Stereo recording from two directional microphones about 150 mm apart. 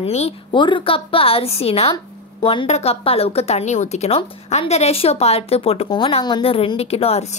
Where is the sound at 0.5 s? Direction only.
35° left (ahead or behind).